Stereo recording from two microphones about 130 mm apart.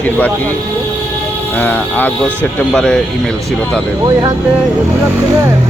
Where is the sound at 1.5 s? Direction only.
10° left (ahead or behind).